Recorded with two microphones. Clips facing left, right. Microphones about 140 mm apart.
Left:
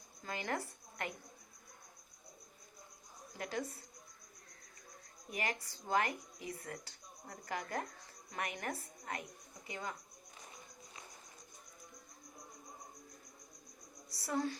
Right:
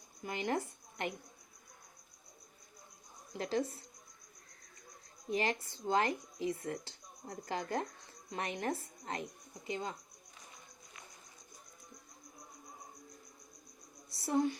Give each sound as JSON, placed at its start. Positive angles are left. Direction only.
{"t": 0.2, "sound": "a woman's voice", "side_deg": -20}
{"t": 3.3, "sound": "speech", "side_deg": -30}
{"t": 5.3, "sound": "speech", "side_deg": -30}
{"t": 14.1, "sound": "a woman's voice", "side_deg": -25}